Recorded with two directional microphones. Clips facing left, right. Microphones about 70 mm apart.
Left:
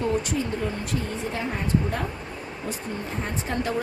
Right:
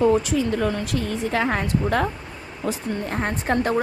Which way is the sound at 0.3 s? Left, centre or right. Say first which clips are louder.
Right 6 dB; right.